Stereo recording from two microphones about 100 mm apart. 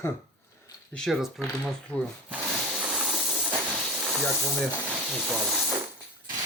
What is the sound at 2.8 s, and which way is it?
Hiss, 5° right (ahead or behind).